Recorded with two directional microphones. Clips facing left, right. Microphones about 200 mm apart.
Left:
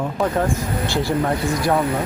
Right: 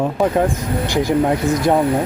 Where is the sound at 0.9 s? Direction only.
15° right (ahead or behind).